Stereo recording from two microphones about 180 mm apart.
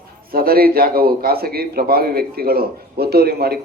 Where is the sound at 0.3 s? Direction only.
55° right (ahead or behind).